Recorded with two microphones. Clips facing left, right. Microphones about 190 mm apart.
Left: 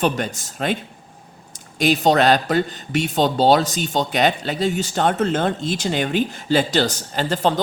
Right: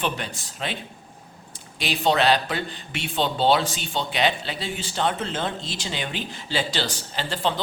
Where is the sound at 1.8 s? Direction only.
45° left (ahead or behind).